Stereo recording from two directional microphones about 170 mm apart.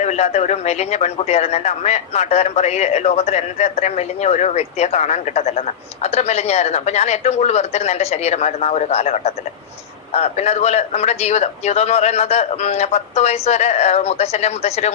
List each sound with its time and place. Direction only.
0.0 s a man's voice: 40° left (ahead or behind)